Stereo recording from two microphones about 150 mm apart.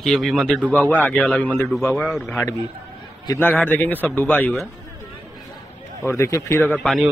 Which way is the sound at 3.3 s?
10° left (ahead or behind).